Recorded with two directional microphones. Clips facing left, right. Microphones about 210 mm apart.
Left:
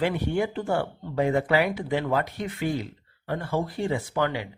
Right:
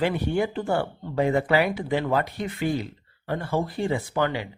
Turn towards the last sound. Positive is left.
turn(degrees=-30)  # may be behind; listen again after turning